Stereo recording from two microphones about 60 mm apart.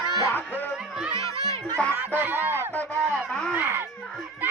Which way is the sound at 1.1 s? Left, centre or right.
Left.